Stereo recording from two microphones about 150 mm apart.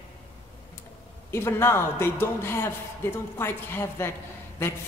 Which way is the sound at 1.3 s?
15° left (ahead or behind).